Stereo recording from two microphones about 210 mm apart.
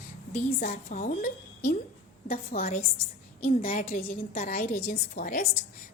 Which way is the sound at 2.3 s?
45° left (ahead or behind).